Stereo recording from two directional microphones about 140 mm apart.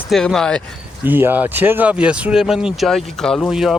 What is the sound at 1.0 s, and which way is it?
Speech, 15° right (ahead or behind).